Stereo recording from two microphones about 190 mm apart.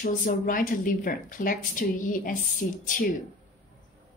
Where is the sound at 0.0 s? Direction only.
45° left (ahead or behind).